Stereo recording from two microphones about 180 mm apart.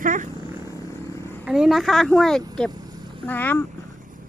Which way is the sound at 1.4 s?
5° right (ahead or behind).